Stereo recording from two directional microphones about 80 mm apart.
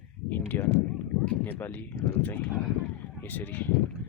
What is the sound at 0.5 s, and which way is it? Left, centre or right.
Speech, left.